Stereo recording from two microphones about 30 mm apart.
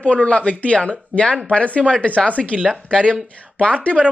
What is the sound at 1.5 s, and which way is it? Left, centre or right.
Speech, left.